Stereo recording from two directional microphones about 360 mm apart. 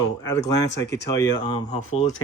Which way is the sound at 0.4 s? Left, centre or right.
Centre.